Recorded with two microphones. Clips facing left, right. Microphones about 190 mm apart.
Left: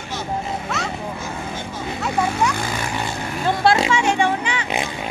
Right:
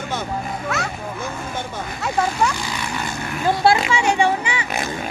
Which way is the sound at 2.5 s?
55° left (ahead or behind).